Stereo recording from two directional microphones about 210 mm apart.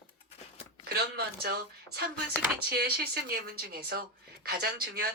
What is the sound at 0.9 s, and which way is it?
Speech, 50° right (ahead or behind).